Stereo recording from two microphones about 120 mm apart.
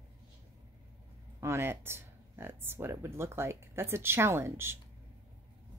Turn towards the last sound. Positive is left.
turn(degrees=-20)  # may be behind; listen again after turning